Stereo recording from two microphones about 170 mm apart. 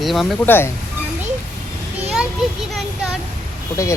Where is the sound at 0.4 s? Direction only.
10° left (ahead or behind).